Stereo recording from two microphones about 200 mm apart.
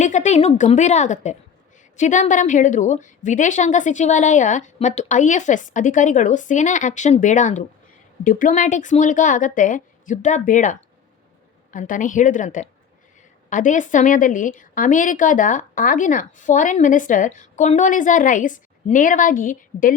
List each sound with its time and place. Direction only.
0.0 s a woman's voice: 35° left (ahead or behind)